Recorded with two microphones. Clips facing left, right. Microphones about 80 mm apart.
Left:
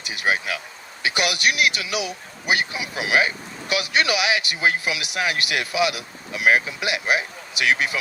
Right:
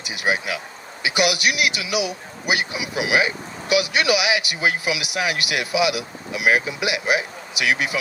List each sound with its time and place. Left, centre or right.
0.3 s speech: left